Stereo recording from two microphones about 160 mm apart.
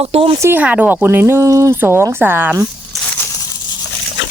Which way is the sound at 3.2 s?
20° left (ahead or behind).